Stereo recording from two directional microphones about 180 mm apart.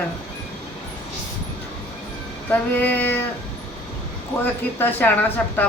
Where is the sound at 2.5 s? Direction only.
10° left (ahead or behind).